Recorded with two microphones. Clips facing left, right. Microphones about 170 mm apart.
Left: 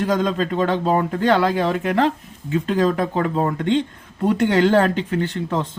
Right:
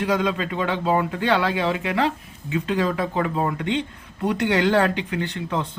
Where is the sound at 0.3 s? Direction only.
40° left (ahead or behind).